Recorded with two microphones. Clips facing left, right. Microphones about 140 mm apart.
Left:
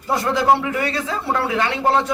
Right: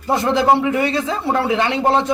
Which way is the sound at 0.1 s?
20° right (ahead or behind).